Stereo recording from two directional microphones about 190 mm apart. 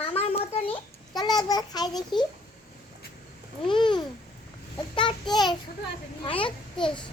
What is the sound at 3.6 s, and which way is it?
A child's voice, 25° left (ahead or behind).